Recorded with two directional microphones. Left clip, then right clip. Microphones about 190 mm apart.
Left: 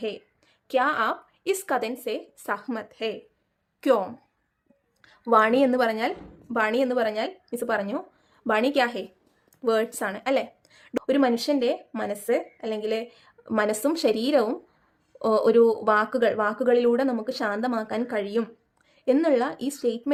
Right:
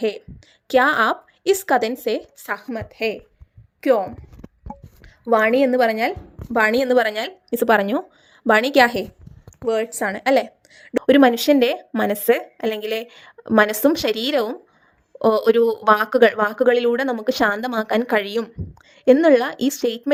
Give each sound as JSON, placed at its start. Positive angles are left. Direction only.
{"t": 0.7, "sound": "a woman's voice", "side_deg": -35}
{"t": 3.8, "sound": "a woman's voice", "side_deg": -15}
{"t": 6.7, "sound": "a woman's voice", "side_deg": -40}
{"t": 9.6, "sound": "speech", "side_deg": -10}
{"t": 10.0, "sound": "a woman's voice", "side_deg": -30}
{"t": 11.0, "sound": "speech", "side_deg": -45}